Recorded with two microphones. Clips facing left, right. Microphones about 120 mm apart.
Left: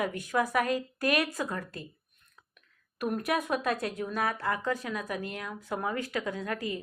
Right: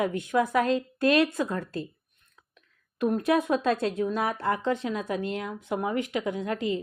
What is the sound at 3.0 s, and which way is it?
Speech, 25° right (ahead or behind).